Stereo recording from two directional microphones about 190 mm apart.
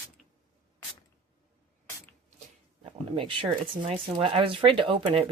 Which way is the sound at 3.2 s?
25° right (ahead or behind).